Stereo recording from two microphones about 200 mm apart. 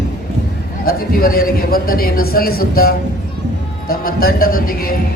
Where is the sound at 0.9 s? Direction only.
45° left (ahead or behind).